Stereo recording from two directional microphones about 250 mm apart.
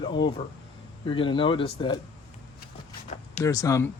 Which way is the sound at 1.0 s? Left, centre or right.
Left.